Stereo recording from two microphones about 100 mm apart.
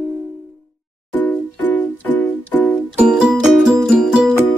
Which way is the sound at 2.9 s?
10° right (ahead or behind).